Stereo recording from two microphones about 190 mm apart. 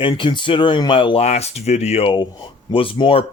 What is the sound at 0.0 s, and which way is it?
Speech, 25° left (ahead or behind).